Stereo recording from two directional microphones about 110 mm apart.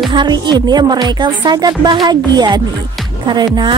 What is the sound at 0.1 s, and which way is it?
Speech, 45° right (ahead or behind).